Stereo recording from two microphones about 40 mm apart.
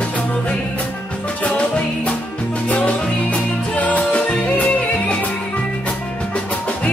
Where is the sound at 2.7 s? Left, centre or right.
Left.